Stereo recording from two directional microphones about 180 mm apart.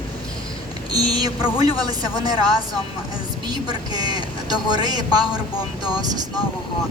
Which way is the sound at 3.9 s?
20° right (ahead or behind).